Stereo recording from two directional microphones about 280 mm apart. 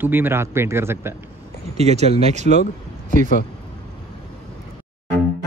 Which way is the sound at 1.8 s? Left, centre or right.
Right.